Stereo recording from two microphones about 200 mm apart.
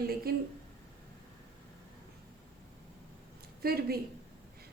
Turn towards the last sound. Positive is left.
turn(degrees=-50)  # may be behind; listen again after turning